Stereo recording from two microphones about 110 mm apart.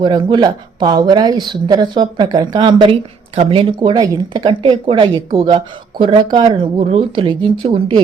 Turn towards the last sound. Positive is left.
turn(degrees=-55)  # may be behind; listen again after turning